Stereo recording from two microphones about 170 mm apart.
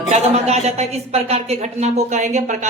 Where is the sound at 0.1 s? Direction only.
40° right (ahead or behind).